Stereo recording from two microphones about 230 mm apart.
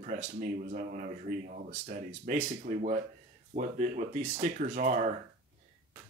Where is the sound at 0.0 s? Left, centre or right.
Right.